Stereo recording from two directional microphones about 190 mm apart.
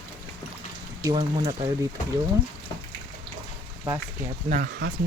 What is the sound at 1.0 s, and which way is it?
Speech, 20° right (ahead or behind).